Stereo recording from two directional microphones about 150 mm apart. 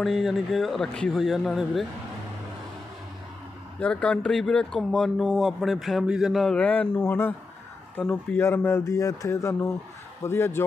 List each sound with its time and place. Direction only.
0.0 s speech: centre (ahead or behind)
3.8 s speech: 5° left (ahead or behind)